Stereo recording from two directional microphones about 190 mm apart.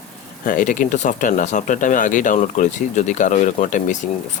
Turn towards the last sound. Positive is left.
turn(degrees=40)  # may be behind; listen again after turning